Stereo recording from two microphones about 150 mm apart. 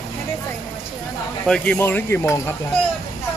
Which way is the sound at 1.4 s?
5° left (ahead or behind).